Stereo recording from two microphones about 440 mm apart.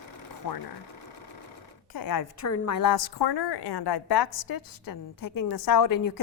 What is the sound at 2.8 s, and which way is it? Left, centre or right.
A woman's voice, left.